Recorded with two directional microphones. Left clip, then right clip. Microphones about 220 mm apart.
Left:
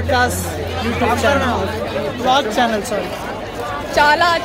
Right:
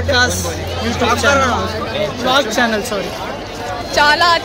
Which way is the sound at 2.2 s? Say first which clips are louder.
Even; 15° right (ahead or behind).